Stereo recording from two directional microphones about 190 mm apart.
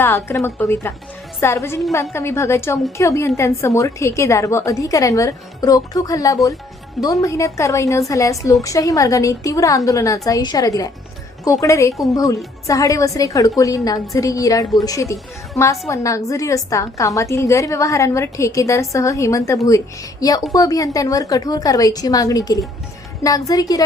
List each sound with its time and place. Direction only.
0.0 s a woman's voice: 10° left (ahead or behind)